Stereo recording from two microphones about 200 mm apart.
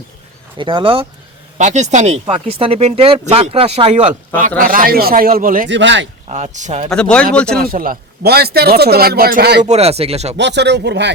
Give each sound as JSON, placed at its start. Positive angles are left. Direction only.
{"t": 0.5, "sound": "speech", "side_deg": -25}
{"t": 4.4, "sound": "speech", "side_deg": -45}
{"t": 5.6, "sound": "speech", "side_deg": -65}
{"t": 6.2, "sound": "speech", "side_deg": -35}
{"t": 6.9, "sound": "speech", "side_deg": 5}
{"t": 7.6, "sound": "speech", "side_deg": -45}
{"t": 9.6, "sound": "speech", "side_deg": -30}
{"t": 10.3, "sound": "speech", "side_deg": -60}